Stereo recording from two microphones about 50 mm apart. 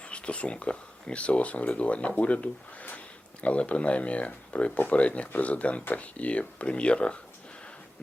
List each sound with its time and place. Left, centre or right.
0.0 s speech: left